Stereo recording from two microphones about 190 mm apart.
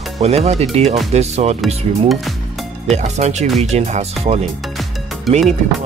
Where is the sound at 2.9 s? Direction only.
35° right (ahead or behind).